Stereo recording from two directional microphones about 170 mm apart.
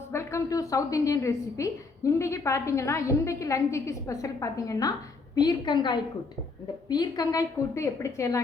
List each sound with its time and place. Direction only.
0.1 s a woman's voice: 15° left (ahead or behind)